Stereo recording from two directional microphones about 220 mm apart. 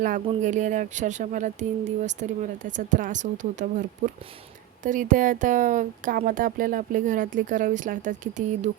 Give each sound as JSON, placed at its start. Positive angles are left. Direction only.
{"t": 0.3, "sound": "speech", "side_deg": -35}